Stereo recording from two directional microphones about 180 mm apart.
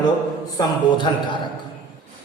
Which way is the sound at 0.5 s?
25° left (ahead or behind).